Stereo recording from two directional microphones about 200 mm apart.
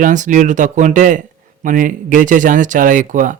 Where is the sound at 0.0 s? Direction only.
40° right (ahead or behind).